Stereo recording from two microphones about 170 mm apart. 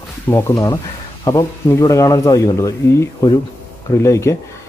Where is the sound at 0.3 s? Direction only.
20° left (ahead or behind).